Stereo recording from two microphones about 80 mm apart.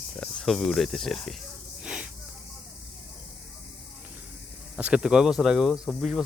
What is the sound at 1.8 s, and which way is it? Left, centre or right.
Snake, centre.